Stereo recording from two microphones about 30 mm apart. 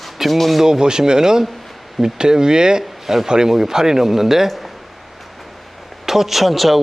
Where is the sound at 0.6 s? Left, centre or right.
Right.